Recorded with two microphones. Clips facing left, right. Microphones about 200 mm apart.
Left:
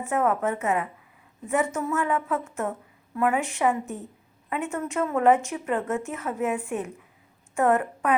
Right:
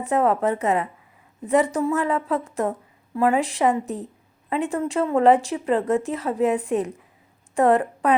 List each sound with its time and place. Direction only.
0.0 s a woman's voice: 35° right (ahead or behind)